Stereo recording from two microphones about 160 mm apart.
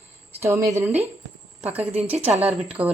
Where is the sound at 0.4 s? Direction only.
20° right (ahead or behind).